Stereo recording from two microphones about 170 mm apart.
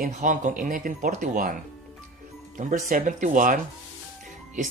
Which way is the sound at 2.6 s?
50° right (ahead or behind).